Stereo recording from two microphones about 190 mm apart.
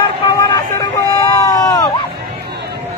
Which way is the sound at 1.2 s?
20° left (ahead or behind).